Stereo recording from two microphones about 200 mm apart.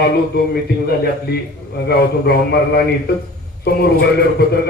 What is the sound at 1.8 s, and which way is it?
A man's voice, 50° left (ahead or behind).